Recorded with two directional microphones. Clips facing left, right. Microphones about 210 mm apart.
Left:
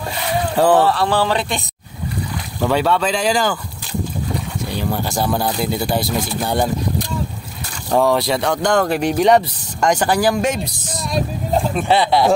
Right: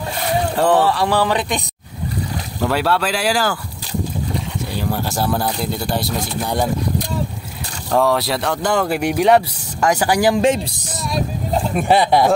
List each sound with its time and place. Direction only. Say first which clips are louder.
0.6 s speech: left 2 dB; centre (ahead or behind)
0.9 s speech: even; 15° right (ahead or behind)
2.6 s speech: left 2 dB; 5° right (ahead or behind)
4.7 s speech: left 1 dB; 5° right (ahead or behind)
7.9 s speech: left 1 dB; centre (ahead or behind)
10.3 s speech: right 3 dB; 30° right (ahead or behind)
11.7 s speech: right 4 dB; 15° right (ahead or behind)